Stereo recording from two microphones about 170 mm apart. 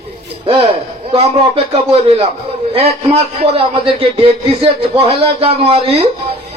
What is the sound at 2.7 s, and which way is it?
A man's voice, 35° right (ahead or behind).